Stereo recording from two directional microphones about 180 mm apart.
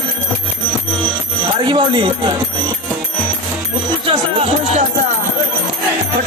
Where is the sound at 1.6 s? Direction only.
25° right (ahead or behind).